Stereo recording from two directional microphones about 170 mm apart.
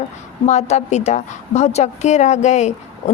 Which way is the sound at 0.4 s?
40° left (ahead or behind).